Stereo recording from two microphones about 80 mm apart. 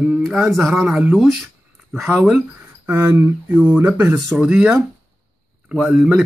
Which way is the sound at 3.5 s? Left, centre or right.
Right.